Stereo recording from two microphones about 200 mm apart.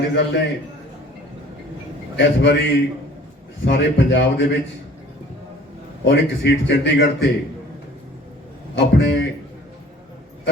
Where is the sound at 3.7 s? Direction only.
65° left (ahead or behind).